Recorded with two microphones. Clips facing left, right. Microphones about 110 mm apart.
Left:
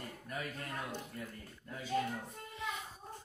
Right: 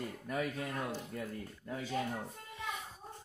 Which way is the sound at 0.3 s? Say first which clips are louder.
Right 5 dB; 85° right.